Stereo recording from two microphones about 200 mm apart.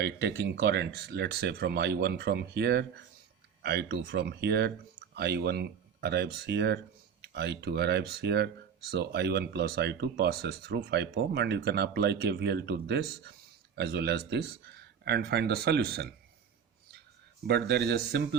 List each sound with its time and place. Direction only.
0.0 s speech: 55° right (ahead or behind)
17.4 s speech: 55° right (ahead or behind)